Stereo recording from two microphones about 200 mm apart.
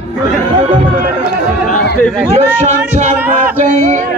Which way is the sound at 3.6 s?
35° right (ahead or behind).